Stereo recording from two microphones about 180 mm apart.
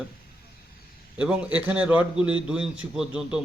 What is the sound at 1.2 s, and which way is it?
A man's voice, 5° right (ahead or behind).